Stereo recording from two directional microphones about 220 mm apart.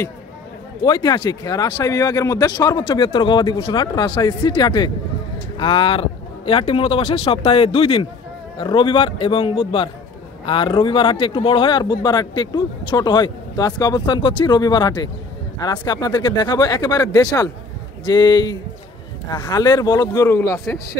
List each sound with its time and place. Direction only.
0.8 s speech: 20° left (ahead or behind)